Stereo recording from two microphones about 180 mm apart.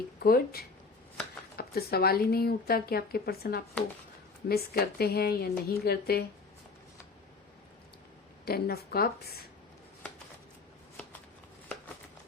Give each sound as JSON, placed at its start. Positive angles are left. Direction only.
{"t": 0.2, "sound": "speech", "side_deg": 55}
{"t": 8.4, "sound": "speech", "side_deg": 60}